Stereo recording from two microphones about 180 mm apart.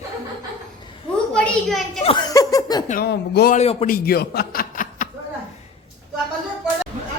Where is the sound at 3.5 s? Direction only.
35° left (ahead or behind).